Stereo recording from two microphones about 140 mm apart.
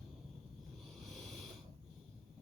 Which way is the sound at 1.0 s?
Centre (ahead or behind).